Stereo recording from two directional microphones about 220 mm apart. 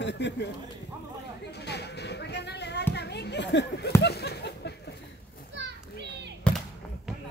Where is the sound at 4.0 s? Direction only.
45° left (ahead or behind).